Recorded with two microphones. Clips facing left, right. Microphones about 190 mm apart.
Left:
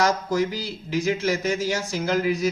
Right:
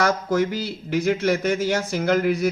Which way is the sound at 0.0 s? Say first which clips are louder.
Right 1 dB; 55° right (ahead or behind).